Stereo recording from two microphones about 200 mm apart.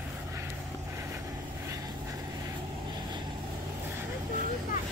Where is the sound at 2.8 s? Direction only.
20° right (ahead or behind).